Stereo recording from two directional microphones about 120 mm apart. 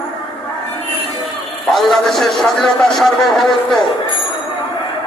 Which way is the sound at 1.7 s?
Centre (ahead or behind).